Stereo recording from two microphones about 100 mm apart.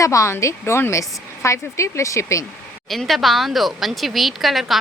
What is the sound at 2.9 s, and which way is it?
Speech, centre (ahead or behind).